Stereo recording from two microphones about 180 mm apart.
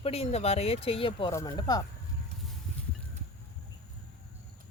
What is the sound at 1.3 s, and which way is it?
Speech, 20° left (ahead or behind).